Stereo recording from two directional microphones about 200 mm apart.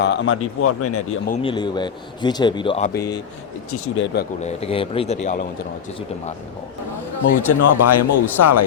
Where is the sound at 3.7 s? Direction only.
90° left.